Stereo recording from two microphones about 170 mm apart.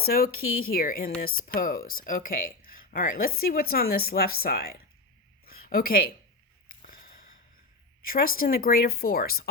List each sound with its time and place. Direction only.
0.0 s speech: 65° left (ahead or behind)
5.5 s a sound: 60° left (ahead or behind)
8.0 s speech: 60° left (ahead or behind)